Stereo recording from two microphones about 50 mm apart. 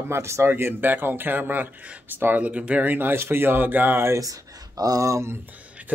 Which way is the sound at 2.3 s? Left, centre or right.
Right.